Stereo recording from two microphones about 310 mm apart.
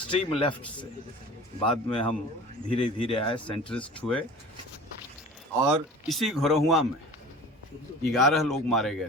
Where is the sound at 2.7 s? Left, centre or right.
Centre.